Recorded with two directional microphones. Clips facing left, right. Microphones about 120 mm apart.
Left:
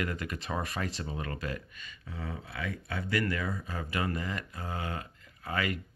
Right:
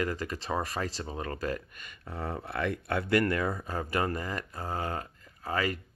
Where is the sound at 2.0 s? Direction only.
55° right (ahead or behind).